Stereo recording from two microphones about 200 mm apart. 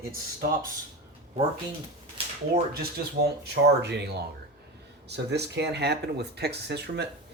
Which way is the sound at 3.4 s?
55° right (ahead or behind).